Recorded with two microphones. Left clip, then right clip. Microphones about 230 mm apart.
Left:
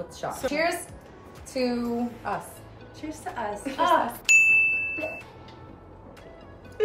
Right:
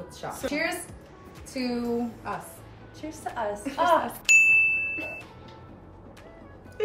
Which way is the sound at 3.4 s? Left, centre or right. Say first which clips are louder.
Right 2 dB; centre.